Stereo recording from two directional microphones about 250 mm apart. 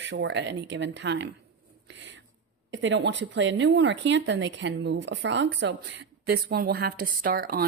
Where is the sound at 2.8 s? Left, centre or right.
Right.